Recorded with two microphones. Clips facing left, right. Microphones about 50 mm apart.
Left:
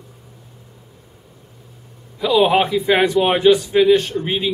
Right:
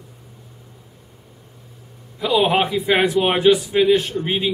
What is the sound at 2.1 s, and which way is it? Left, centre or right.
A man's voice, centre.